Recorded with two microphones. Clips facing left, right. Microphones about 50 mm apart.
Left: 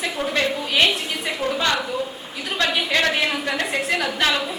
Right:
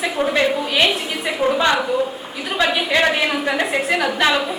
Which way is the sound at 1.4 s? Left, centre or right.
Centre.